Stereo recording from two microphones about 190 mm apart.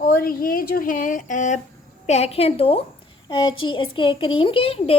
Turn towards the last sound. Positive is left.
turn(degrees=30)  # may be behind; listen again after turning